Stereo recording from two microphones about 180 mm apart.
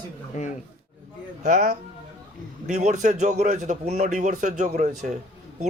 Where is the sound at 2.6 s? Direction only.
40° right (ahead or behind).